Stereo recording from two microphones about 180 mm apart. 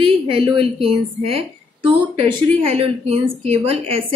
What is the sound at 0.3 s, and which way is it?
A woman's voice, 30° right (ahead or behind).